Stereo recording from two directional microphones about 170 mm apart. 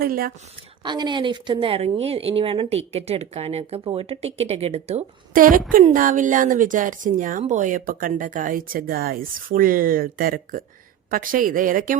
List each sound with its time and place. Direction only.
0.0 s a woman's voice: 60° right (ahead or behind)
0.8 s speech: 25° right (ahead or behind)
5.3 s a woman's voice: 55° right (ahead or behind)